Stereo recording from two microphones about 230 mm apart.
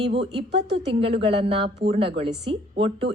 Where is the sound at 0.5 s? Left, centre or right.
Right.